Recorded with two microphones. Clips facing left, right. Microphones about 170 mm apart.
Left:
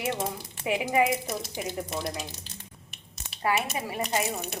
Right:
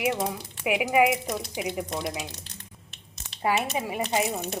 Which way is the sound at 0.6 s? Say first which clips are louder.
Right 3 dB; 10° right (ahead or behind).